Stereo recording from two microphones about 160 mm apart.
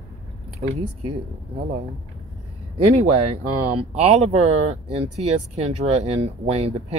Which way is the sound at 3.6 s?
45° right (ahead or behind).